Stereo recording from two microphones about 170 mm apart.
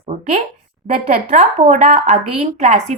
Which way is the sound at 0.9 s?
35° right (ahead or behind).